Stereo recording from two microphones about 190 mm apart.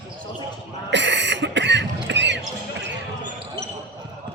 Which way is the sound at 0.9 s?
70° right (ahead or behind).